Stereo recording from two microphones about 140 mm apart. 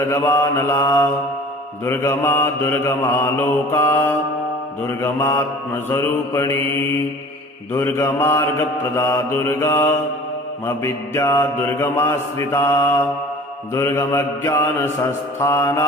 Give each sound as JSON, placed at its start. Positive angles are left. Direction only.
{"t": 0.1, "sound": "mantra", "side_deg": 15}